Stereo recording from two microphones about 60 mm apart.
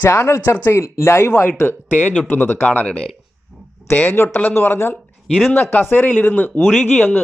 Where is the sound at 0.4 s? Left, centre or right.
Left.